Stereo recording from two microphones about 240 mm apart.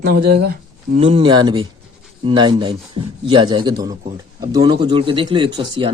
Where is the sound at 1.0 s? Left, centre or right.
Right.